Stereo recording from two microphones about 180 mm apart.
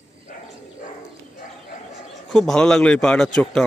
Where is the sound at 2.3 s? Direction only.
5° left (ahead or behind).